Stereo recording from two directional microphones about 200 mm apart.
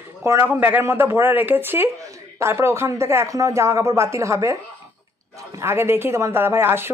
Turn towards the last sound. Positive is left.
turn(degrees=-10)  # may be behind; listen again after turning